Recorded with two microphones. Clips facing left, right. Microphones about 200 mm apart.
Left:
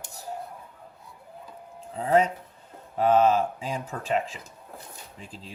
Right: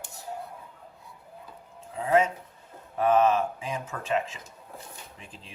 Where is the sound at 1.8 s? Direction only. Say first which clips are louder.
Left 1 dB; 35° left (ahead or behind).